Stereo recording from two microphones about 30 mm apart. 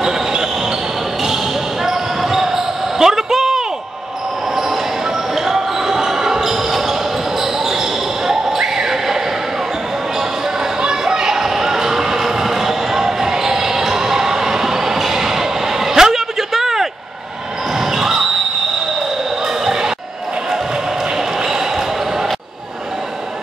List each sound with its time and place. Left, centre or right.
0.0 s basketball bounce: right
5.3 s basketball bounce: centre
8.5 s a sound: centre
10.8 s basketball bounce: right
19.4 s a sound: centre
21.5 s basketball bounce: centre